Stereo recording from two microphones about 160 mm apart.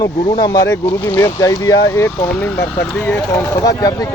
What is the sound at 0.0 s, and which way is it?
Speech, 25° left (ahead or behind).